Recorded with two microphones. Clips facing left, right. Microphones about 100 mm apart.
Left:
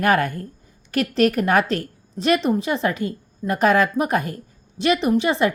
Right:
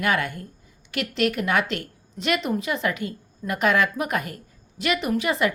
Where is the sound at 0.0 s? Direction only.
40° left (ahead or behind).